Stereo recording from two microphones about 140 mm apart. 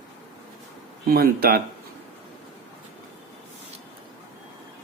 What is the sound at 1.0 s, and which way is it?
Speech, 90° right.